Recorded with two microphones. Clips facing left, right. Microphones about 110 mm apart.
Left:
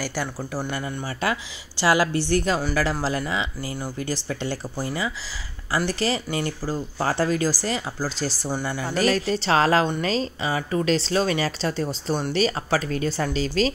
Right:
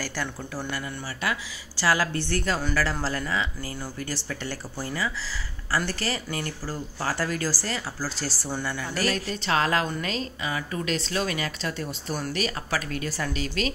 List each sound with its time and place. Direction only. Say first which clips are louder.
0.0 s a woman's voice: left 4 dB; 15° left (ahead or behind)
1.9 s a woman's voice: left 5 dB; 15° left (ahead or behind)
9.3 s speech: left 4 dB; 30° left (ahead or behind)